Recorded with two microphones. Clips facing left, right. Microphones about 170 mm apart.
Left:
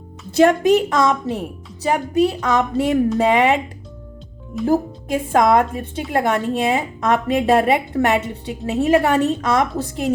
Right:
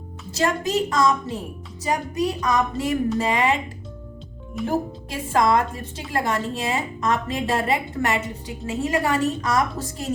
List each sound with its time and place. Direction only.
0.3 s a woman's voice: 60° left (ahead or behind)
4.6 s a woman's voice: 45° left (ahead or behind); by 10.1 s 65° left (ahead or behind)